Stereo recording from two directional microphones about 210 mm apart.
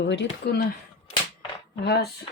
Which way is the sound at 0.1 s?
55° left (ahead or behind).